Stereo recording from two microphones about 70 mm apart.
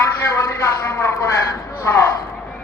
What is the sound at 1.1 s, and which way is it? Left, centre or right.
Speech, left.